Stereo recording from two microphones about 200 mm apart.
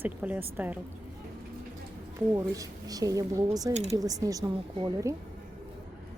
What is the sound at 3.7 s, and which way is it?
Speech, 30° right (ahead or behind).